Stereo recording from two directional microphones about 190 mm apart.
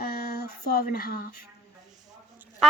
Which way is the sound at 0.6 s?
55° left (ahead or behind).